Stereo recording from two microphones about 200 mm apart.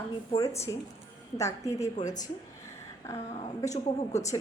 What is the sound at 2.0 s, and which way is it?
Speech, 40° left (ahead or behind).